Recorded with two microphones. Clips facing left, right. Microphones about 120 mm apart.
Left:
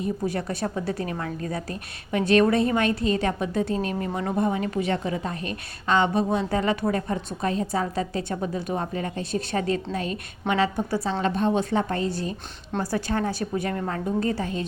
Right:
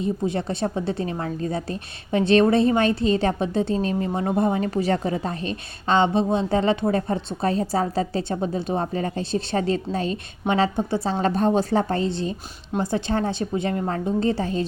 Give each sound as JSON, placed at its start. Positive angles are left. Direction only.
{"t": 0.0, "sound": "a woman's voice", "side_deg": -25}
{"t": 11.2, "sound": "a woman's voice", "side_deg": -40}